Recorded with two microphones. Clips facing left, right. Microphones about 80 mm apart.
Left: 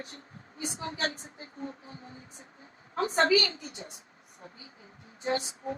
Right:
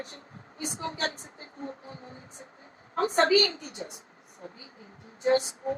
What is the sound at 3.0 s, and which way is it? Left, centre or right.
A woman's voice, right.